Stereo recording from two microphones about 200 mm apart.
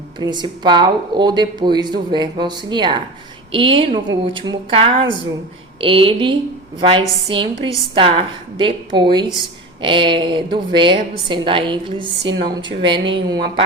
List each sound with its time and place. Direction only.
0.2 s speech: 20° right (ahead or behind)